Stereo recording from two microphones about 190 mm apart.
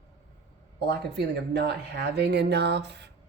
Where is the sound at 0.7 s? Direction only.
60° right (ahead or behind).